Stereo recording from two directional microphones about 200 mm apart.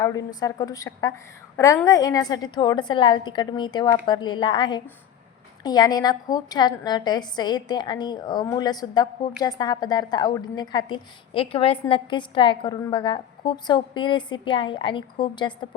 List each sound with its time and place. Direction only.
0.3 s a woman's voice: 20° left (ahead or behind)